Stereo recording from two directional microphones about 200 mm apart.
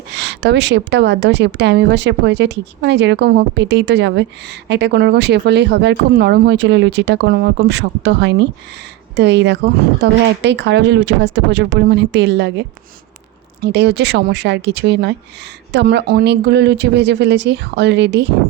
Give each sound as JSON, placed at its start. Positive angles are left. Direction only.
{"t": 0.2, "sound": "a woman's voice", "side_deg": -60}